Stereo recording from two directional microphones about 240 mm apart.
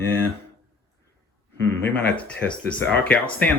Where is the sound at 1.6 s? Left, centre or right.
Centre.